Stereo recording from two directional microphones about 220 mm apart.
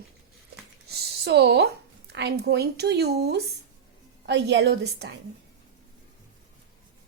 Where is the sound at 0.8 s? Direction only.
50° right (ahead or behind).